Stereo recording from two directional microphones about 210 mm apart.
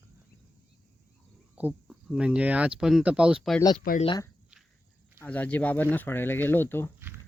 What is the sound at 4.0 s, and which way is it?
Speech, 25° left (ahead or behind).